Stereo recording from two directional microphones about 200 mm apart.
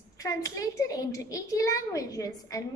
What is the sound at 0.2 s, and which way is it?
A child's voice, 15° left (ahead or behind).